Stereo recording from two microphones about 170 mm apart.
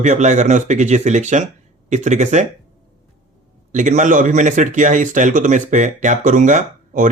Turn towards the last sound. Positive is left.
turn(degrees=-45)  # may be behind; listen again after turning